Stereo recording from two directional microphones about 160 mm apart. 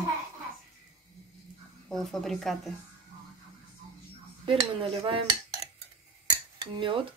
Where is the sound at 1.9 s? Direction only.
Centre (ahead or behind).